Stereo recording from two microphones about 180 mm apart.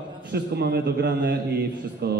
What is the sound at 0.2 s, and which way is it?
A man's voice, 65° right (ahead or behind).